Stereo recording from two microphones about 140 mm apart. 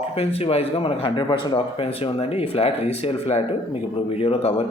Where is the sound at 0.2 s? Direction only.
45° left (ahead or behind).